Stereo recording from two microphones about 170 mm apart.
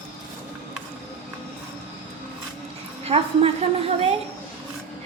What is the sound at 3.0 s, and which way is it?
A woman's voice, 35° right (ahead or behind).